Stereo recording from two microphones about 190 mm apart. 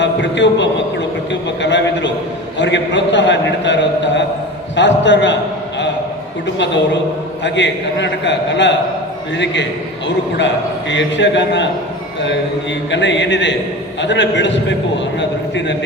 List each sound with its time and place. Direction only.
0.0 s a man's voice: 70° left (ahead or behind)
7.4 s a man's voice: 70° left (ahead or behind)
12.9 s a man's voice: 70° left (ahead or behind)